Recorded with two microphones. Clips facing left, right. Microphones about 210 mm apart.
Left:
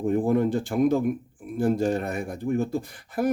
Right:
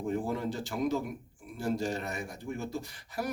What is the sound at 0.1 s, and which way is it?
Speech, 55° left (ahead or behind).